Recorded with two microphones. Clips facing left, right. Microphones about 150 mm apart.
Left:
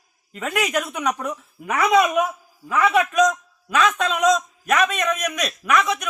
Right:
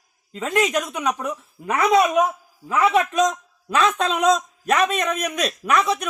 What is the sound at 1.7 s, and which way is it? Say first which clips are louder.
A man's voice: even; 30° right (ahead or behind).